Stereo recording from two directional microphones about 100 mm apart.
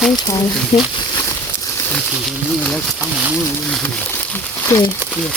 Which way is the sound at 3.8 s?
20° left (ahead or behind).